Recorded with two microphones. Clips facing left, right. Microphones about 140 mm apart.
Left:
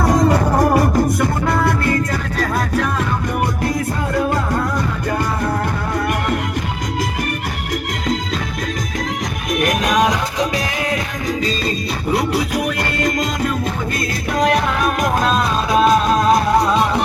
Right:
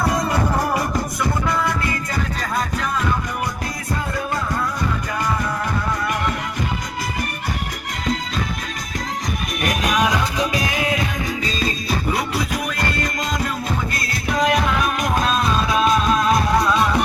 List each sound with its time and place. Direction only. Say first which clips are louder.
0.3 s music: left 6 dB; 45° left (ahead or behind)
9.6 s music: left 3 dB; centre (ahead or behind)
14.3 s music: left 2 dB; 45° left (ahead or behind)
16.6 s music: left 2 dB; 30° left (ahead or behind)